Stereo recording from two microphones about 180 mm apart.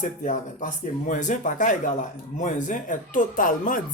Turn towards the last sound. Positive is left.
turn(degrees=50)  # may be behind; listen again after turning